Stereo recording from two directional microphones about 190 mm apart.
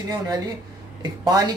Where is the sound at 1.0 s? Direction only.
20° right (ahead or behind).